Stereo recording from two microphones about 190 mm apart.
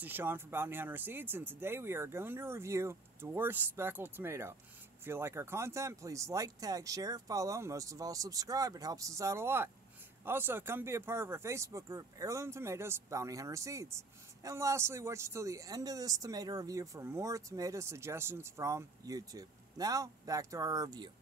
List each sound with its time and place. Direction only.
0.0 s speech: 10° right (ahead or behind)